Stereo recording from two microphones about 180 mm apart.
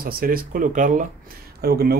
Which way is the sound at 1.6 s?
60° right (ahead or behind).